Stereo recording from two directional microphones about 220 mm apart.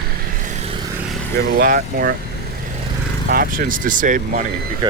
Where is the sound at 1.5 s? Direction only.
40° right (ahead or behind).